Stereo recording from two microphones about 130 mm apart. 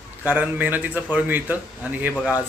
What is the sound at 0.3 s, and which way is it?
Speech, 15° right (ahead or behind).